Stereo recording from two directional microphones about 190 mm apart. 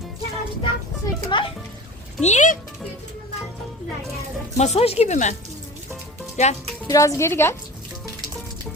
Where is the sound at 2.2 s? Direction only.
40° left (ahead or behind).